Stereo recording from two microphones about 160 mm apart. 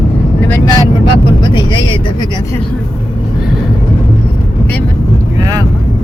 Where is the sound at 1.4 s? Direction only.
25° left (ahead or behind).